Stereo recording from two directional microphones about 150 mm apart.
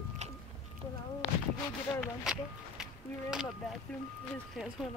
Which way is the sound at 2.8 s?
5° right (ahead or behind).